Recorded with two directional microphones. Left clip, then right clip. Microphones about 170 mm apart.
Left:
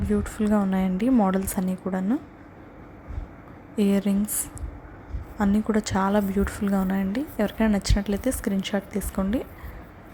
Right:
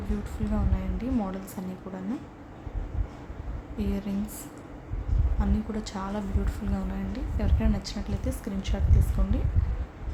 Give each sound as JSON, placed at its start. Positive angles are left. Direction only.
{"t": 0.3, "sound": "a woman's voice", "side_deg": 40}
{"t": 3.8, "sound": "a woman's voice", "side_deg": 45}
{"t": 5.4, "sound": "a woman's voice", "side_deg": 40}